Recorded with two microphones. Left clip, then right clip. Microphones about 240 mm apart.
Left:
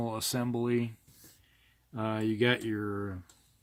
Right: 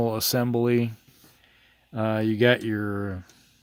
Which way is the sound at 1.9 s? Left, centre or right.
Right.